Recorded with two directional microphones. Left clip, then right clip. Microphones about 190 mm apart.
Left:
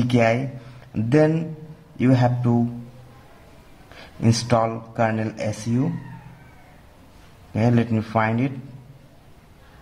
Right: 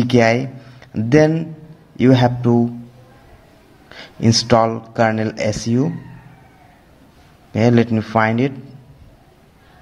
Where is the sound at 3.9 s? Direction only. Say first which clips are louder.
Right 7 dB; 25° right (ahead or behind).